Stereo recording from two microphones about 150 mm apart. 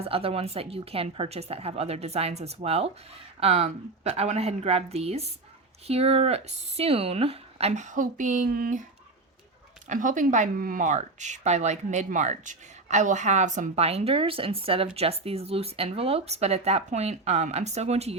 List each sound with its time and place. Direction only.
0.0 s speech: 40° right (ahead or behind); by 8.8 s 70° right (ahead or behind)
9.8 s speech: 60° right (ahead or behind)